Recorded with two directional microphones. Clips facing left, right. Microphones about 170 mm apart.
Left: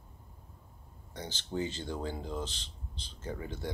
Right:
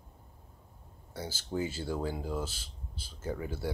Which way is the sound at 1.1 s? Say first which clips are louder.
Right 1 dB; 10° right (ahead or behind).